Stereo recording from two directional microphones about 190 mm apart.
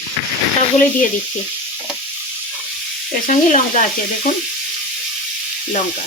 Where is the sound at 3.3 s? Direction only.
40° left (ahead or behind).